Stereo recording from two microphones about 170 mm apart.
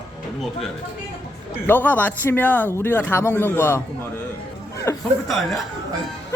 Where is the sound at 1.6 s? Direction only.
10° left (ahead or behind).